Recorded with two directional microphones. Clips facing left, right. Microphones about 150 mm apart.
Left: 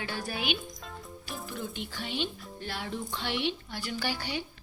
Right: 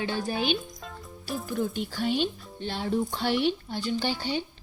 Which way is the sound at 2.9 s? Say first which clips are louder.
Right 9 dB; 40° right (ahead or behind).